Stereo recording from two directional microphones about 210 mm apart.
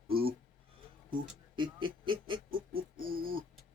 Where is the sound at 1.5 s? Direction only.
25° right (ahead or behind).